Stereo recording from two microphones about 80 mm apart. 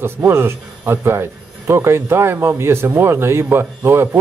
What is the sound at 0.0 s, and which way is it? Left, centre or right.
Speech, right.